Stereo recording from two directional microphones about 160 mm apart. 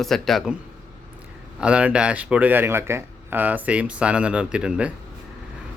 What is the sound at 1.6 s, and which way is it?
Speech, 5° right (ahead or behind).